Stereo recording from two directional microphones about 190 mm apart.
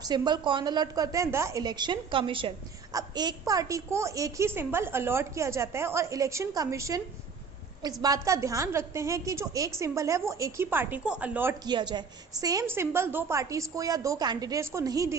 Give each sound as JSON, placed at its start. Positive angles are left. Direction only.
{"t": 0.0, "sound": "a woman's voice", "side_deg": -20}
{"t": 8.0, "sound": "a woman's voice", "side_deg": -20}
{"t": 11.6, "sound": "a woman's voice", "side_deg": -25}